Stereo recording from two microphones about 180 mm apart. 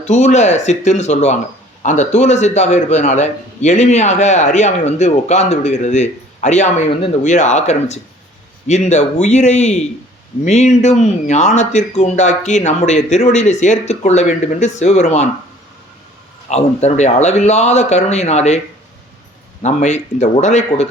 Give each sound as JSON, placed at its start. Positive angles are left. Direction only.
{"t": 0.0, "sound": "a man's voice", "side_deg": 40}
{"t": 16.5, "sound": "a man's voice", "side_deg": 40}
{"t": 19.6, "sound": "a man's voice", "side_deg": 40}